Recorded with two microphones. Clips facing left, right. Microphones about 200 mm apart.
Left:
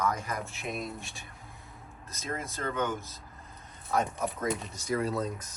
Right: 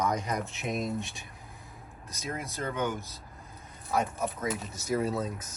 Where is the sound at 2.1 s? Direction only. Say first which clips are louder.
Even; 15° right (ahead or behind).